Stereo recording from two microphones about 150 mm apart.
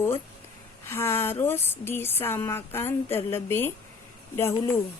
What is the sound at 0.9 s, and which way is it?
Speech, 15° left (ahead or behind).